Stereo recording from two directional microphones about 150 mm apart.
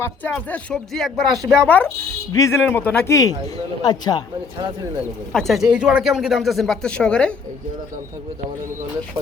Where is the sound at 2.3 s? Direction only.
20° left (ahead or behind).